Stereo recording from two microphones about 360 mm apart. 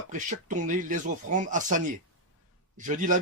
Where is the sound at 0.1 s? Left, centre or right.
Right.